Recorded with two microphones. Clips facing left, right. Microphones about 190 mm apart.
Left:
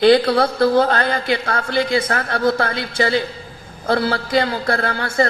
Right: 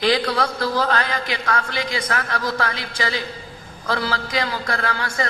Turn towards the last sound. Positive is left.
turn(degrees=35)  # may be behind; listen again after turning